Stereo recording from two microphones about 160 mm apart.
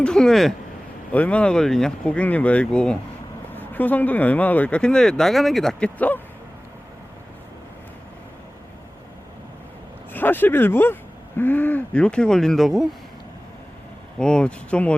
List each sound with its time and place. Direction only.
0.0 s speech: 5° left (ahead or behind)
10.1 s speech: 10° left (ahead or behind)
14.2 s speech: 5° left (ahead or behind)